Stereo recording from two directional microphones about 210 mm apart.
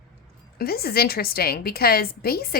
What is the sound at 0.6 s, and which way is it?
Speech, 45° left (ahead or behind).